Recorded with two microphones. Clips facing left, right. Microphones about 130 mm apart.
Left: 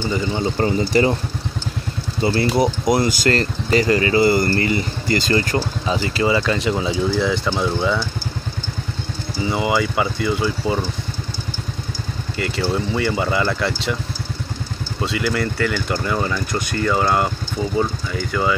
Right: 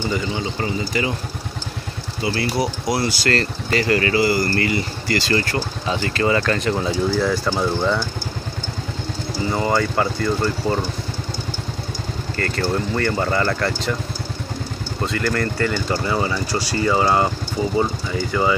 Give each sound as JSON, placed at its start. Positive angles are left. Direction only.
{"t": 0.4, "sound": "speech", "side_deg": 40}
{"t": 2.2, "sound": "speech", "side_deg": 25}
{"t": 9.4, "sound": "speech", "side_deg": 5}
{"t": 12.4, "sound": "speech", "side_deg": 10}
{"t": 15.0, "sound": "speech", "side_deg": 10}